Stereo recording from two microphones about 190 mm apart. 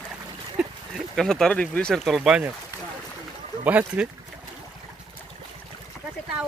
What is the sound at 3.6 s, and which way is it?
Speech, 5° right (ahead or behind).